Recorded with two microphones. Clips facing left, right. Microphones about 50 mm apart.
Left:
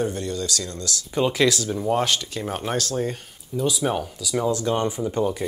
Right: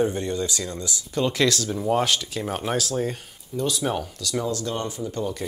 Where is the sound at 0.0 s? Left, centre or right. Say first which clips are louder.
Right 2 dB; centre.